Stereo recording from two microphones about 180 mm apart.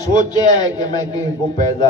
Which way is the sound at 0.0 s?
20° left (ahead or behind).